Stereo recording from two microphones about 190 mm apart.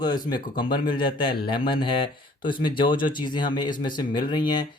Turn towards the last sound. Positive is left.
turn(degrees=25)  # may be behind; listen again after turning